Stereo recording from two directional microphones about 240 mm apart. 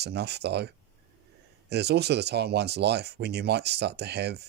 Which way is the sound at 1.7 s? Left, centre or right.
Right.